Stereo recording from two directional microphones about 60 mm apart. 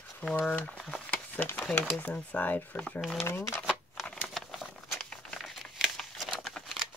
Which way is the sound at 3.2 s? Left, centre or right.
Left.